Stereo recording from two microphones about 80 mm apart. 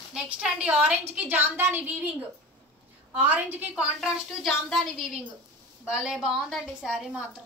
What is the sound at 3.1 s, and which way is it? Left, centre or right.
Speech, right.